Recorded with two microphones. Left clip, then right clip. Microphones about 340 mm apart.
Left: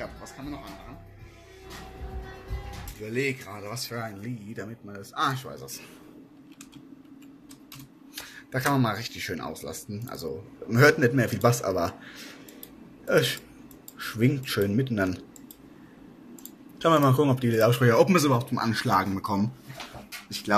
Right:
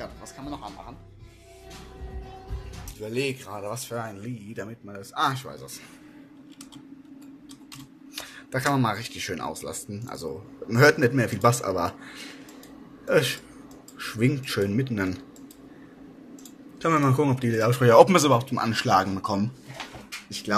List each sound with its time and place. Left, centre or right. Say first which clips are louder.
0.0 s music: even; centre
3.0 s speech: even; centre
8.2 s a man's voice: right 1 dB; centre
16.8 s speech: left 1 dB; centre
20.2 s a sound: left 2 dB; centre